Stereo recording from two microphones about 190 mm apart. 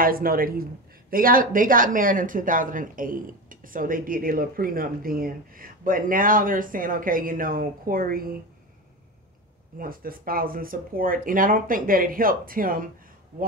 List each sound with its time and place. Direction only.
0.0 s speech: 50° right (ahead or behind)
9.8 s speech: 50° right (ahead or behind)